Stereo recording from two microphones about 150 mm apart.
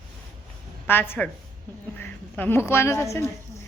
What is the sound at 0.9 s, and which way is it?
A man's voice, 15° left (ahead or behind).